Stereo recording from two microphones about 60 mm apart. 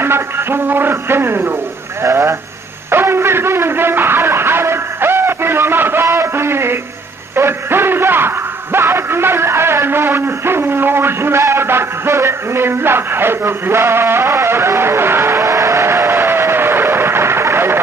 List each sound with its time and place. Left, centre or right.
0.0 s speech: right
2.9 s music: right
6.0 s a sound: right
15.4 s vehicle: right